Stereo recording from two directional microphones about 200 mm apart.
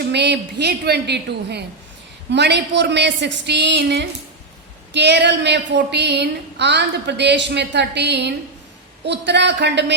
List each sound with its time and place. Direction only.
0.1 s a woman's voice: 60° right (ahead or behind)